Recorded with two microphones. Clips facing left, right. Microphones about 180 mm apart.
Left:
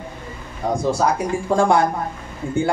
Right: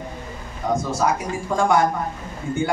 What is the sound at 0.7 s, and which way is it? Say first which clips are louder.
Speech: left 2 dB; 35° left (ahead or behind).